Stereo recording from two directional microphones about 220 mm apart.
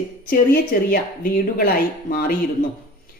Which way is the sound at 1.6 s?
40° left (ahead or behind).